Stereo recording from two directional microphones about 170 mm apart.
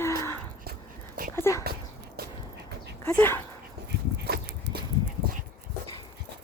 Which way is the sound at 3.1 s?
10° left (ahead or behind).